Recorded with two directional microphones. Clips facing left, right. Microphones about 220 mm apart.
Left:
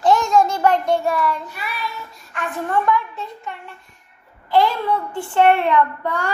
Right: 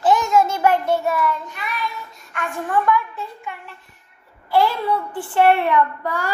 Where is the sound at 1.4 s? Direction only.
5° left (ahead or behind).